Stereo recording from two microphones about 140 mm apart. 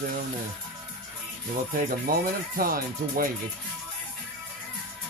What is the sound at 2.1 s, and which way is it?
Speech, 90° right.